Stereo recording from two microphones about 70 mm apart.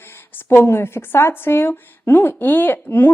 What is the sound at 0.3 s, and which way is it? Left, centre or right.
Speech, left.